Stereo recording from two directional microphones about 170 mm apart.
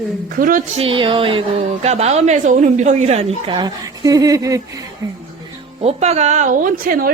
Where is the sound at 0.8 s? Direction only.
30° right (ahead or behind).